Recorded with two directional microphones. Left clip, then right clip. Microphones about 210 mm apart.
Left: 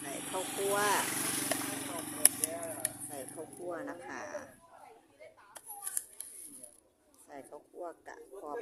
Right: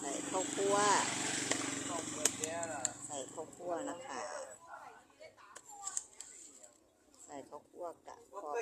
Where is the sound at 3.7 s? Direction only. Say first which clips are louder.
Right 3 dB; 5° left (ahead or behind).